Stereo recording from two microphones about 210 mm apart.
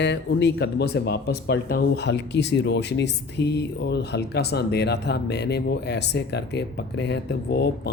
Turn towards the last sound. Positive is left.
turn(degrees=55)  # may be behind; listen again after turning